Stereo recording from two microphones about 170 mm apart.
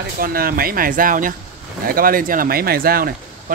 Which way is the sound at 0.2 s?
60° right (ahead or behind).